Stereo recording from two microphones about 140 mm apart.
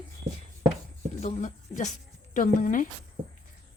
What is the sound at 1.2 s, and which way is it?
A woman's voice, 55° left (ahead or behind).